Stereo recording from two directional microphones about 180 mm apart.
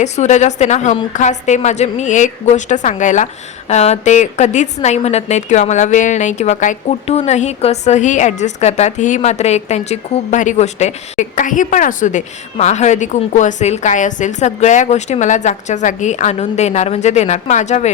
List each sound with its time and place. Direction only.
0.0 s a woman's voice: 40° left (ahead or behind)